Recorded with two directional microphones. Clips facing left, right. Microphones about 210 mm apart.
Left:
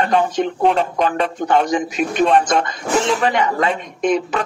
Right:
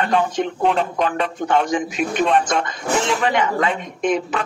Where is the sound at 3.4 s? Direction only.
35° left (ahead or behind).